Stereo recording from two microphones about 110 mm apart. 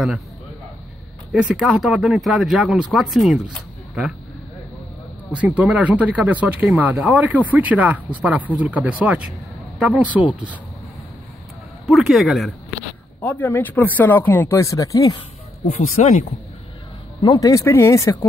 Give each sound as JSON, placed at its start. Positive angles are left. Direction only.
{"t": 1.3, "sound": "speech", "side_deg": -5}
{"t": 5.3, "sound": "speech", "side_deg": -15}
{"t": 11.8, "sound": "speech", "side_deg": -5}
{"t": 13.2, "sound": "speech", "side_deg": 20}
{"t": 16.0, "sound": "speech", "side_deg": 90}
{"t": 17.2, "sound": "speech", "side_deg": 35}